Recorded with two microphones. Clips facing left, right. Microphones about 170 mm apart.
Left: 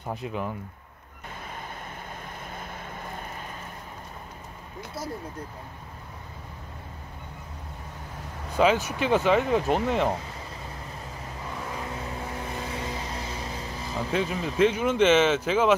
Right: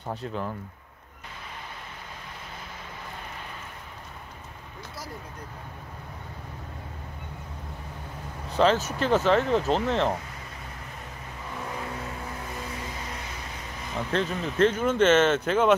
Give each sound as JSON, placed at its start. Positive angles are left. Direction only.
{"t": 0.0, "sound": "speech", "side_deg": 10}
{"t": 8.5, "sound": "speech", "side_deg": 10}
{"t": 13.1, "sound": "vehicle", "side_deg": 30}
{"t": 14.1, "sound": "speech", "side_deg": 5}